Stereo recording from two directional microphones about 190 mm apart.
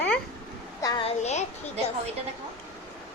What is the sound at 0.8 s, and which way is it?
Speech, 30° left (ahead or behind).